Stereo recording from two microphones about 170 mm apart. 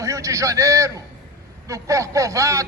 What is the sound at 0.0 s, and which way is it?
A man's voice, 20° right (ahead or behind).